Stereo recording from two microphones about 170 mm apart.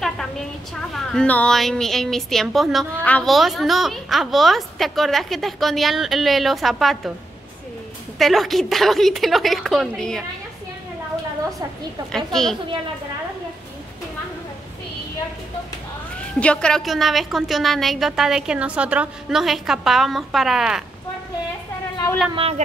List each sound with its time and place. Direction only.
0.9 s a woman's voice: 5° left (ahead or behind)
8.2 s a woman's voice: centre (ahead or behind)
12.3 s a woman's voice: centre (ahead or behind)
16.2 s a woman's voice: 5° left (ahead or behind)
22.3 s speech: 35° right (ahead or behind)